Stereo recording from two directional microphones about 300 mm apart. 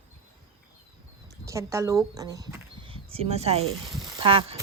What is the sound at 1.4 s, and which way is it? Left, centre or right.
Speech, centre.